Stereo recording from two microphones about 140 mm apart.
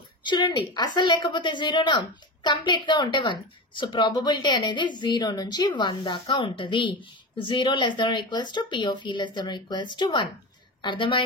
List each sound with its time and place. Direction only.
0.2 s a woman's voice: 35° left (ahead or behind)